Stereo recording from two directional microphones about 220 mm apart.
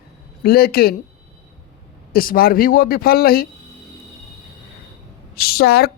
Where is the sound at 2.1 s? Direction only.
40° left (ahead or behind).